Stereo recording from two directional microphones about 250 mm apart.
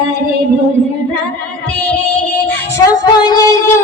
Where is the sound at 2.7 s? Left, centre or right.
Centre.